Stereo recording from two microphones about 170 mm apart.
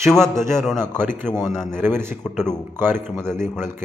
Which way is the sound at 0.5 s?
5° left (ahead or behind).